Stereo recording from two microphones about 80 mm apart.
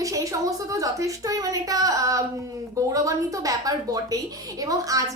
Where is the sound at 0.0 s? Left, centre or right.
Right.